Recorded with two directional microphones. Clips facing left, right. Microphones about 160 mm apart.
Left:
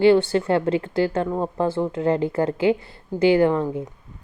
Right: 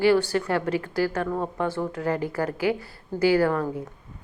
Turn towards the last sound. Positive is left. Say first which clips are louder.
# left 4 dB
turn(degrees=20)  # may be behind; listen again after turning